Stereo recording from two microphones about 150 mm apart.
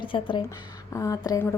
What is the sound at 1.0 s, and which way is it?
Speech, 20° left (ahead or behind).